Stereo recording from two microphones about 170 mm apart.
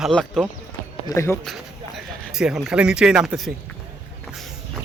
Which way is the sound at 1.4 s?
Centre (ahead or behind).